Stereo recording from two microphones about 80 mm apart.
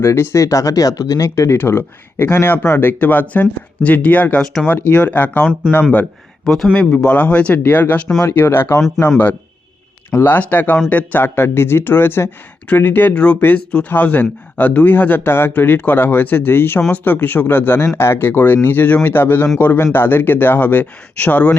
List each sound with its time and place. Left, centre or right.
0.0 s speech: left
1.5 s speech: left
6.4 s speech: centre
6.7 s speech: centre
8.2 s speech: left